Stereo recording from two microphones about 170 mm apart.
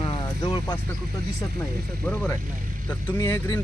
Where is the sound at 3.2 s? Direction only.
20° left (ahead or behind).